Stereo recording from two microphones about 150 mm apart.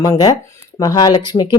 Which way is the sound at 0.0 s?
25° left (ahead or behind).